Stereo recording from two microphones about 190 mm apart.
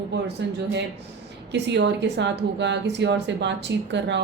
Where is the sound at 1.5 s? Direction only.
65° right (ahead or behind).